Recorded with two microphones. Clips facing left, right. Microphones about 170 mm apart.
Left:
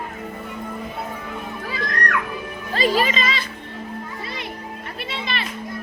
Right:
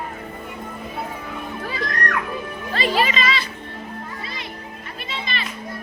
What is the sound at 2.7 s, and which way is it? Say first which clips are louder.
Music: left 1 dB; 40° left (ahead or behind).